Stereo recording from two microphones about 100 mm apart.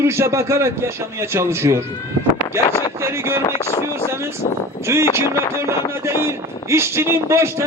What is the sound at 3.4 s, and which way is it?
Speech, 35° left (ahead or behind).